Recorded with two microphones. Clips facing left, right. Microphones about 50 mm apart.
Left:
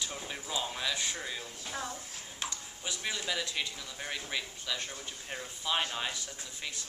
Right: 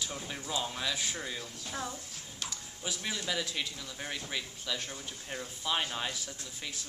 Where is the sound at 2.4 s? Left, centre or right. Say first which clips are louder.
Even; centre.